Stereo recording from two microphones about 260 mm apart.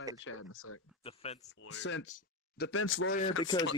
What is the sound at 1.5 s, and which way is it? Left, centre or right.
Speech, left.